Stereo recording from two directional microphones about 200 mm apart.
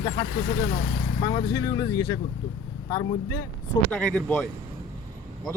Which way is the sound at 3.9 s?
5° left (ahead or behind).